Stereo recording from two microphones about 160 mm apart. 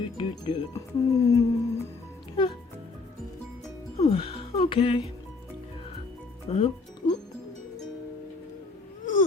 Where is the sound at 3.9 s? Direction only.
40° left (ahead or behind).